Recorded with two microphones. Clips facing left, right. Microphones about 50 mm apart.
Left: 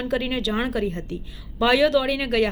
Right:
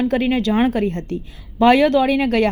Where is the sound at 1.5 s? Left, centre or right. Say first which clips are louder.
Right 5 dB; right.